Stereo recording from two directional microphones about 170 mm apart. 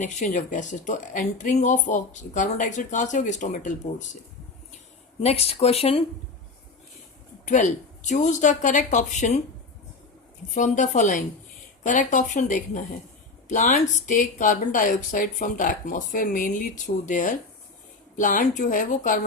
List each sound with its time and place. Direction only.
0.0 s speech: 45° left (ahead or behind)
5.2 s speech: 35° left (ahead or behind)
7.4 s speech: 45° left (ahead or behind)
10.5 s speech: 45° left (ahead or behind)